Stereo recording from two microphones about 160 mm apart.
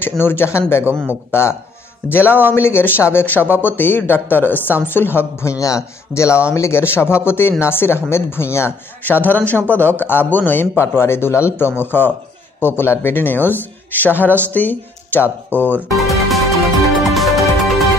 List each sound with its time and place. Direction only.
0.0 s a woman's voice: 15° left (ahead or behind)
15.9 s music: centre (ahead or behind)